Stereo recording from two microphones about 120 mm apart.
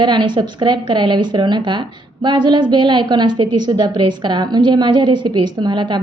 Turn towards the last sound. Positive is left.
turn(degrees=-40)  # may be behind; listen again after turning